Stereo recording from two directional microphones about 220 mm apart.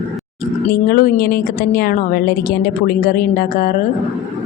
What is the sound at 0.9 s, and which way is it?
A woman's voice, 40° left (ahead or behind).